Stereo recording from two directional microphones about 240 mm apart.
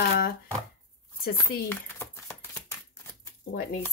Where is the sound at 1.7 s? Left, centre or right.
Centre.